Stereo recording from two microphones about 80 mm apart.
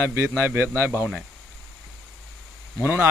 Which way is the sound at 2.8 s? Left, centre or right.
Right.